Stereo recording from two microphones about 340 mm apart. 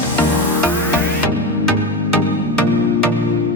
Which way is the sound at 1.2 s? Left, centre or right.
Left.